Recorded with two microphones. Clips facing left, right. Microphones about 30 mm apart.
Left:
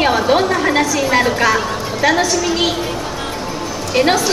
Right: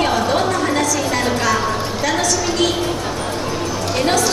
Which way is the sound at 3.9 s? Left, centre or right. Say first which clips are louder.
Left 4 dB; left.